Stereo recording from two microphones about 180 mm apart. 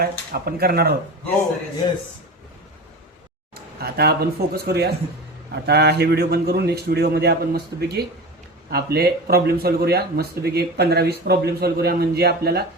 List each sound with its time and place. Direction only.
0.0 s speech: 55° right (ahead or behind)
3.5 s speech: 60° right (ahead or behind)